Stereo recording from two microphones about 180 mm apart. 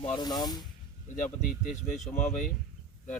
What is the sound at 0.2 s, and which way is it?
Speech, 20° left (ahead or behind).